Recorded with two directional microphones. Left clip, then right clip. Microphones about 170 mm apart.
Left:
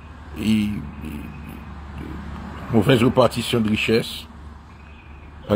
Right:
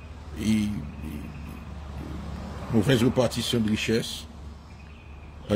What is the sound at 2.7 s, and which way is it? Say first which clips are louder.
Speech: left 6 dB; 15° right (ahead or behind).